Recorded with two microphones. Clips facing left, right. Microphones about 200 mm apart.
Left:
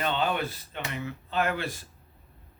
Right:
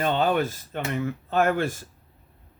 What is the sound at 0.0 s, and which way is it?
Speech, 45° right (ahead or behind).